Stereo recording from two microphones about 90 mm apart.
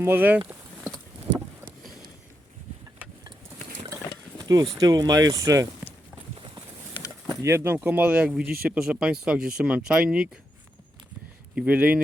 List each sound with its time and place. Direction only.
0.0 s speech: 20° right (ahead or behind)
4.4 s a sound: 40° right (ahead or behind)
4.8 s speech: 45° right (ahead or behind)
6.3 s a sound: 65° right (ahead or behind)
7.4 s speech: 25° right (ahead or behind); by 10.2 s 10° right (ahead or behind)
11.5 s speech: 15° right (ahead or behind)